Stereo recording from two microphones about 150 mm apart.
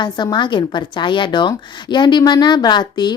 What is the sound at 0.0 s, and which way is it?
A woman's voice, 30° left (ahead or behind).